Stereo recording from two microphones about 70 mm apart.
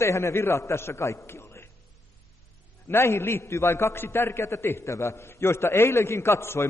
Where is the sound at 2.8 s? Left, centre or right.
Left.